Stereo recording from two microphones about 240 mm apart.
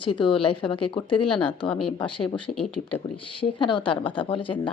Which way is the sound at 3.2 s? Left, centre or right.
Left.